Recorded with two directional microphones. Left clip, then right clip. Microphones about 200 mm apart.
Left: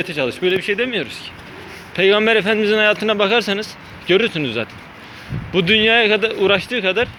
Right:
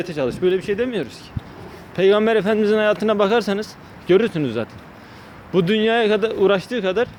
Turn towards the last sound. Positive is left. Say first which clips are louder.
# left 2 dB
turn(degrees=-20)  # may be behind; listen again after turning